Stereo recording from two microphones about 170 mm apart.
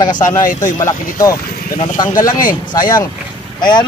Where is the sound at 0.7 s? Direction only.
20° left (ahead or behind).